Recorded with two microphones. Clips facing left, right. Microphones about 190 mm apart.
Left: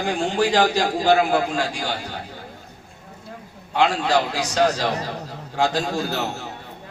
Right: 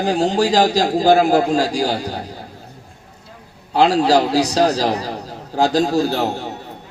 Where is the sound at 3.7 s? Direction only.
35° right (ahead or behind).